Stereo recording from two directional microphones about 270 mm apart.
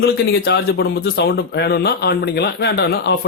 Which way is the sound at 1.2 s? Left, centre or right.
Left.